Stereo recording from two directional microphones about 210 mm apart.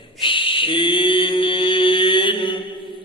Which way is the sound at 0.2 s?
25° left (ahead or behind).